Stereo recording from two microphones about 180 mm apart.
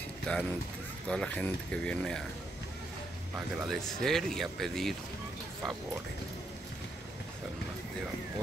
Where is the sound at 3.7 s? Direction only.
5° left (ahead or behind).